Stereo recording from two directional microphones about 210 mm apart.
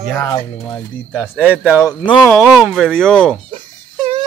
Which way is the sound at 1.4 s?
5° right (ahead or behind).